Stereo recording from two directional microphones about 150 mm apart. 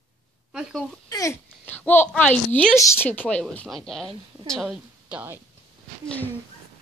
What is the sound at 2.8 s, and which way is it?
A woman's voice, 15° left (ahead or behind).